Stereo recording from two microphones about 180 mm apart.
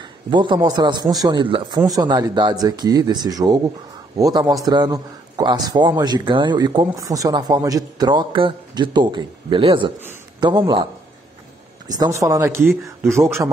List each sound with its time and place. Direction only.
0.0 s speech: 25° right (ahead or behind)
11.9 s a man's voice: 20° right (ahead or behind)